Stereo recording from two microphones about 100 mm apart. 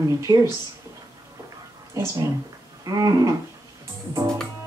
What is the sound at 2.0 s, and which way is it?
Speech, 30° right (ahead or behind).